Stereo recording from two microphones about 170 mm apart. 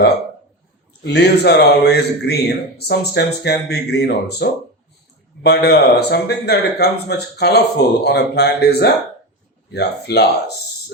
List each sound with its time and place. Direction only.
1.0 s speech: 75° left (ahead or behind)